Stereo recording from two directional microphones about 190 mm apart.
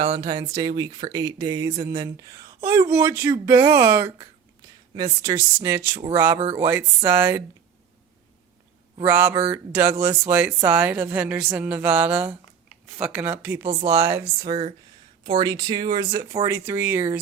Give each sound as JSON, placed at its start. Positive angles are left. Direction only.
{"t": 0.0, "sound": "speech", "side_deg": -25}
{"t": 9.0, "sound": "speech", "side_deg": -10}
{"t": 16.5, "sound": "speech", "side_deg": -10}